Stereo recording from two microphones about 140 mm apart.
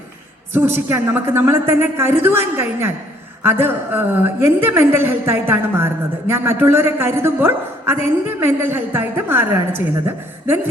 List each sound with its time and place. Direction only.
0.5 s a woman's voice: 15° right (ahead or behind)